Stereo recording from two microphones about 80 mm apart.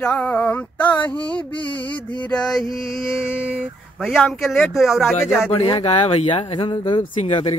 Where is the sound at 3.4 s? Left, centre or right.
Centre.